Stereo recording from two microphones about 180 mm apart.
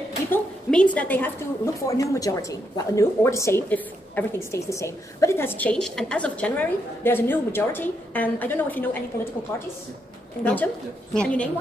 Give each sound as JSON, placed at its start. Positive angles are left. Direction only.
{"t": 0.3, "sound": "a woman's voice", "side_deg": 5}
{"t": 10.4, "sound": "a woman's voice", "side_deg": 10}